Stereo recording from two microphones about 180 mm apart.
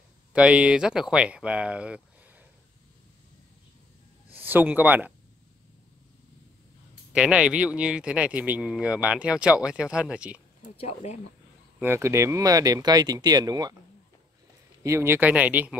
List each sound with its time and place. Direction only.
0.3 s speech: 5° right (ahead or behind)
4.3 s speech: 10° right (ahead or behind)
7.1 s speech: 5° right (ahead or behind)
10.8 s speech: 40° left (ahead or behind)
11.8 s speech: 15° right (ahead or behind)
14.8 s speech: 15° right (ahead or behind)